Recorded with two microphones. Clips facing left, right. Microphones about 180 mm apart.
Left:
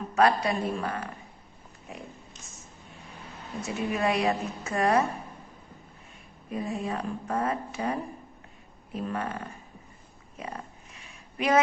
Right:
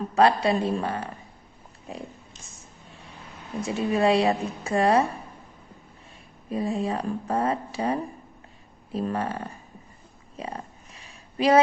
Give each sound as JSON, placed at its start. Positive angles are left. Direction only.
{"t": 0.1, "sound": "a woman's voice", "side_deg": -30}
{"t": 3.8, "sound": "a woman's voice", "side_deg": -30}
{"t": 6.5, "sound": "speech", "side_deg": -30}
{"t": 10.9, "sound": "a sound", "side_deg": -30}